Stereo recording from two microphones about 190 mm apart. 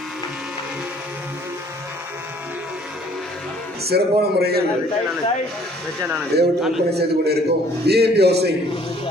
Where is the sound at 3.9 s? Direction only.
60° right (ahead or behind).